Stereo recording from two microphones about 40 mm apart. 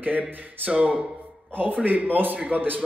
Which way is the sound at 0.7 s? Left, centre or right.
Right.